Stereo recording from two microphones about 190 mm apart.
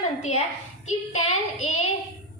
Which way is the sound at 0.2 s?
35° left (ahead or behind).